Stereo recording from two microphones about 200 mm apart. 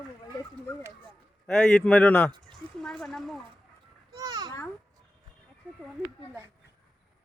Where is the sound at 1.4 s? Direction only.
Centre (ahead or behind).